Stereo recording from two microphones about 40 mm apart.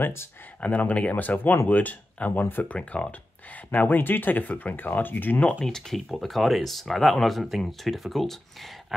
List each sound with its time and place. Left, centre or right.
0.0 s speech: left
0.6 s speech: left
2.7 s speech: left
3.7 s speech: left
5.6 s speech: centre